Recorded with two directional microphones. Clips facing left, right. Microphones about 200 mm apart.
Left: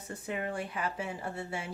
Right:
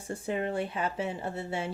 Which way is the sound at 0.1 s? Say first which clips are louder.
Right 5 dB; 30° right (ahead or behind).